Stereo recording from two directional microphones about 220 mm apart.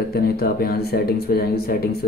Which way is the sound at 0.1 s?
45° left (ahead or behind).